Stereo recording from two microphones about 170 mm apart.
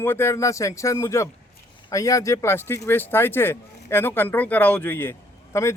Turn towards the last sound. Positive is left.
turn(degrees=15)  # may be behind; listen again after turning